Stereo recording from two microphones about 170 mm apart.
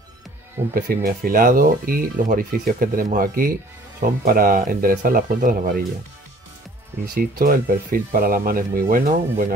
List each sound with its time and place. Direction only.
0.7 s speech: 55° right (ahead or behind)
7.2 s speech: 55° right (ahead or behind)